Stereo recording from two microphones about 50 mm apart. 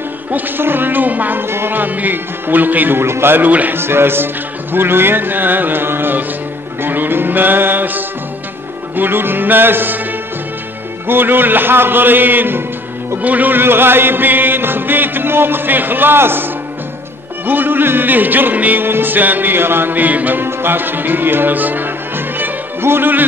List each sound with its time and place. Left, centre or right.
0.3 s music: right
1.4 s music: right
3.0 s music: right
3.4 s music: right
3.7 s music: right
11.1 s music: right
17.5 s music: right
20.4 s speech: right